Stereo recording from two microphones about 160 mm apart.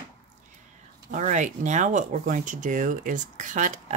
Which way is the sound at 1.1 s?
50° right (ahead or behind).